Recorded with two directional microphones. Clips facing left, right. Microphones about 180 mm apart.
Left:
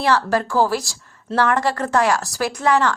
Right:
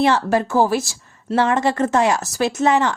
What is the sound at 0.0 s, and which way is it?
A woman's voice, 20° right (ahead or behind).